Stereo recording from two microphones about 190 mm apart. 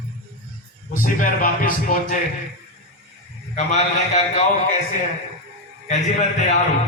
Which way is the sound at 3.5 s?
40° left (ahead or behind).